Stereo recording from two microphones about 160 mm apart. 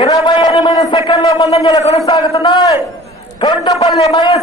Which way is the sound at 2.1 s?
35° left (ahead or behind).